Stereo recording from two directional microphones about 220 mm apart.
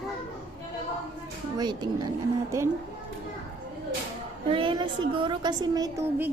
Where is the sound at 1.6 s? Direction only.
20° right (ahead or behind).